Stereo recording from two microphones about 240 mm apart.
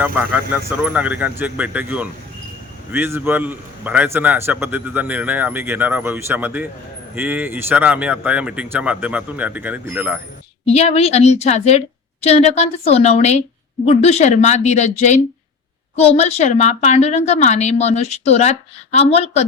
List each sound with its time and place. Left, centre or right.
0.0 s a man's voice: centre
10.7 s a woman's voice: left